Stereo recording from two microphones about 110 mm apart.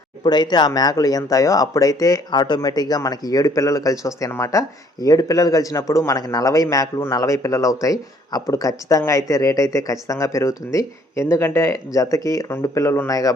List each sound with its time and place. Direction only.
0.2 s speech: 40° left (ahead or behind)